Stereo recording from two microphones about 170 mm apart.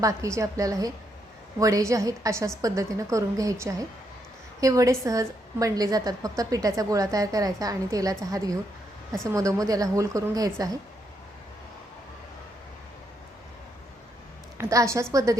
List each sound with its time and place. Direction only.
0.0 s a woman's voice: 20° right (ahead or behind)
14.6 s a woman's voice: 20° right (ahead or behind)